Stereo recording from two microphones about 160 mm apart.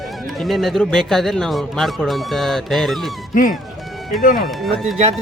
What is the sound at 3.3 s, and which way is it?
Speech, 55° left (ahead or behind).